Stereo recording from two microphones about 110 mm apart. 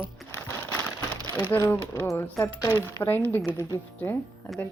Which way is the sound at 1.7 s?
20° left (ahead or behind).